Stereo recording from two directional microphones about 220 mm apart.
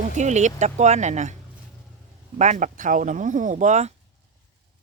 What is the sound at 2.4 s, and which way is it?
Speech, 35° right (ahead or behind).